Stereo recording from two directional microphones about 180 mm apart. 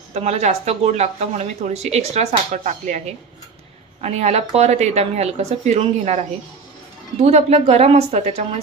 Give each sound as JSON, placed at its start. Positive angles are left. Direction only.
{"t": 0.1, "sound": "speech", "side_deg": -35}
{"t": 4.0, "sound": "speech", "side_deg": -35}
{"t": 7.2, "sound": "speech", "side_deg": -35}